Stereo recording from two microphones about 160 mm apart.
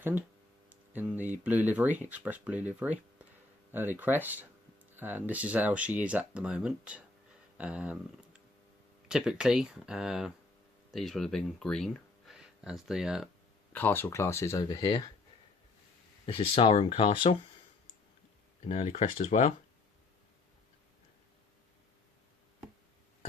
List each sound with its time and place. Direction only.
0.0 s speech: 10° right (ahead or behind)
13.7 s speech: 15° left (ahead or behind)
16.2 s speech: 35° left (ahead or behind)
18.7 s speech: 45° left (ahead or behind)